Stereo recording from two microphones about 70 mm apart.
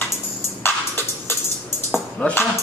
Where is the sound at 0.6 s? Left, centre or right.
Left.